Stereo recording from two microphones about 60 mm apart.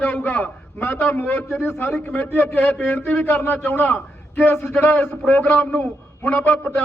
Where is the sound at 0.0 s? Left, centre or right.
Centre.